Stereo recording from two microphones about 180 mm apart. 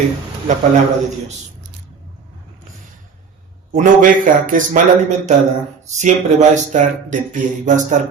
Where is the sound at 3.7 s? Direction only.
50° right (ahead or behind).